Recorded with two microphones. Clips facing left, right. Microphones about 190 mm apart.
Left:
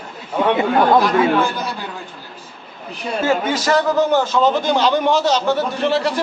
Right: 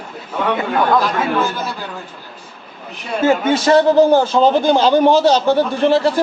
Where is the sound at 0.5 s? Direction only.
25° left (ahead or behind).